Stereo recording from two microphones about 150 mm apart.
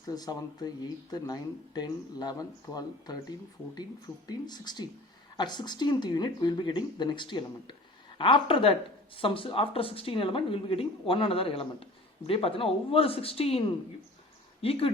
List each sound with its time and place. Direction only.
0.1 s speech: 25° left (ahead or behind)